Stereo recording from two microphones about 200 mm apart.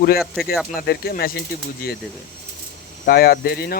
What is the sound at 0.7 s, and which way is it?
Speech, 50° left (ahead or behind).